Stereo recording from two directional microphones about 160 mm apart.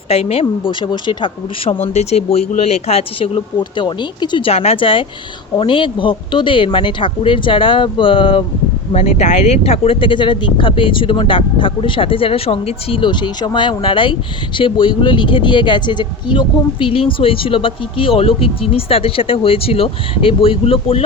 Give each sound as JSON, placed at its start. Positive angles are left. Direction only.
{"t": 0.1, "sound": "speech", "side_deg": 40}
{"t": 1.9, "sound": "speech", "side_deg": 45}